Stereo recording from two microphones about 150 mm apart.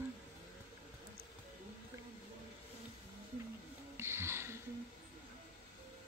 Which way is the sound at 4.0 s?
15° right (ahead or behind).